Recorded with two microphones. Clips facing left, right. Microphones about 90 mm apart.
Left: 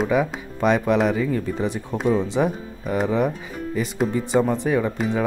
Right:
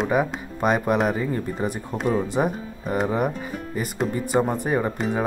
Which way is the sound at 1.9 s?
5° right (ahead or behind).